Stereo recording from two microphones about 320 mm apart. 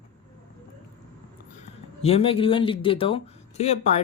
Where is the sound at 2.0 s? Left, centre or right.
Centre.